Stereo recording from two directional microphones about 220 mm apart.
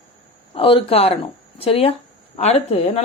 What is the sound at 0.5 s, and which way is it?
Speech, 25° left (ahead or behind).